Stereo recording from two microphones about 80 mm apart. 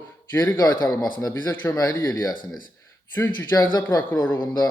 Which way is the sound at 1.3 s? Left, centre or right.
Left.